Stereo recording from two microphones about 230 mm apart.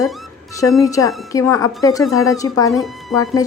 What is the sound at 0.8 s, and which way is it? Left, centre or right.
Speech, centre.